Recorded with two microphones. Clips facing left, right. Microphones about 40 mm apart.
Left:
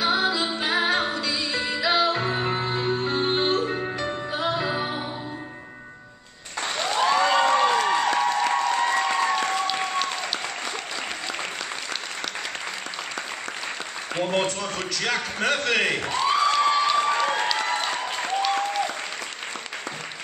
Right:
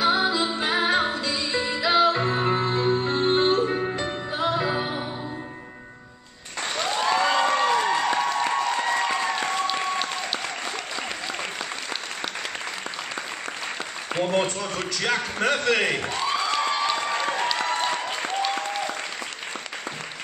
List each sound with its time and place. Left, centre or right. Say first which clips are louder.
0.0 s music: right 1 dB; centre
0.5 s music: even; centre
0.8 s music: right 1 dB; centre
3.0 s music: right 2 dB; right
3.6 s music: right 2 dB; centre
4.4 s music: right 2 dB; centre
4.6 s music: right 1 dB; centre
6.7 s applause: left 1 dB; centre
7.4 s crowd: left 1 dB; centre
7.9 s applause: left 1 dB; centre
14.4 s a sound: even; centre
16.5 s applause: left 4 dB; centre